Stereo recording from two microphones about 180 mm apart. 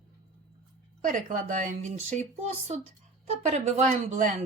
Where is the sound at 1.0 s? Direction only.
45° right (ahead or behind).